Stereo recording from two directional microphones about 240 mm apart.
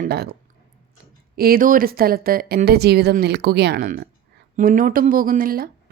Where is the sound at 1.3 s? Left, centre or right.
Right.